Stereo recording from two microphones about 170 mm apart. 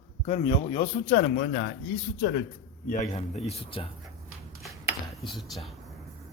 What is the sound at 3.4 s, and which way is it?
Speech, 35° left (ahead or behind).